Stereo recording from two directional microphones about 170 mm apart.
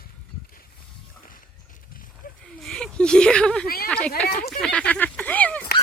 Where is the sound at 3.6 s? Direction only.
65° left (ahead or behind).